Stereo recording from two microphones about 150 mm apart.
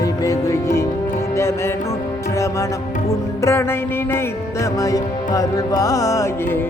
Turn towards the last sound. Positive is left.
turn(degrees=20)  # may be behind; listen again after turning